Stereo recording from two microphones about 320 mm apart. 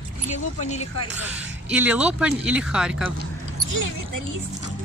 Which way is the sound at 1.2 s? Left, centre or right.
Centre.